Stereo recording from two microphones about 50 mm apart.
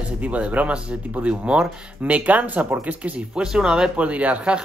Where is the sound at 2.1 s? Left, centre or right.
Right.